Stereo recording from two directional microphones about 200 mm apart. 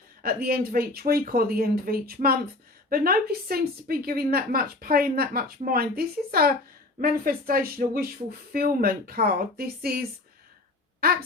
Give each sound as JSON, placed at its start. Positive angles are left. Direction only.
{"t": 0.4, "sound": "a woman's voice", "side_deg": -50}
{"t": 11.0, "sound": "a woman's voice", "side_deg": -50}